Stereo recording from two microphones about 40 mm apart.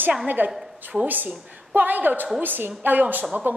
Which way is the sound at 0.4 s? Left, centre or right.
Right.